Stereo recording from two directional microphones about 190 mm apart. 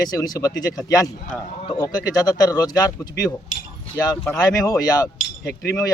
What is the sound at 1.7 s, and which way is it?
Speech, 20° left (ahead or behind).